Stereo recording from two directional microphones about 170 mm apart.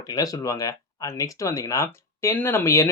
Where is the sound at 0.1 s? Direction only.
20° left (ahead or behind).